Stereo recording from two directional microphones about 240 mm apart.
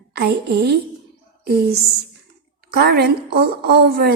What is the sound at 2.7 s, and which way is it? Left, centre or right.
A woman's voice, right.